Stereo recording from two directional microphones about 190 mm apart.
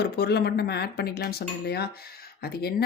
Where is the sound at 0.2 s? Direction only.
60° left (ahead or behind).